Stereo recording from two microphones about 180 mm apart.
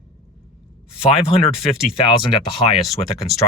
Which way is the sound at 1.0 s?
30° left (ahead or behind).